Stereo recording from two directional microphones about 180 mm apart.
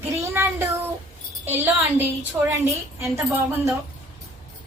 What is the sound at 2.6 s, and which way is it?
Speech, 15° right (ahead or behind).